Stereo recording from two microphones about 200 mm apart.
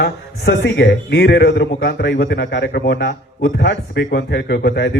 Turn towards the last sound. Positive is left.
turn(degrees=60)  # may be behind; listen again after turning